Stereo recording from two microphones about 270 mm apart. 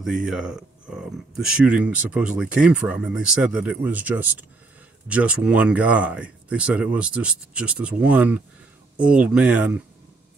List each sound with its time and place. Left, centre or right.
0.0 s speech: centre